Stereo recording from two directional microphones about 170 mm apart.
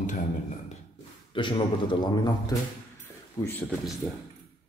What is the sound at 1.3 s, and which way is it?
A man's voice, 30° left (ahead or behind).